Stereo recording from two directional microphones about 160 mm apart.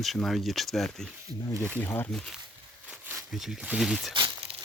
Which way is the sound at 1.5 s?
15° right (ahead or behind).